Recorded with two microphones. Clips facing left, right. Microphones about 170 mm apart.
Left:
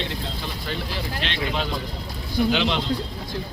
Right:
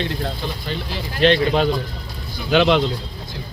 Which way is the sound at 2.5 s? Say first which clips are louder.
Right 12 dB; 55° right (ahead or behind).